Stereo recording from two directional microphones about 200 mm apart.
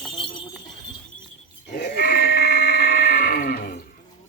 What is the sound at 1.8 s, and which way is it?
Sheep, 50° left (ahead or behind).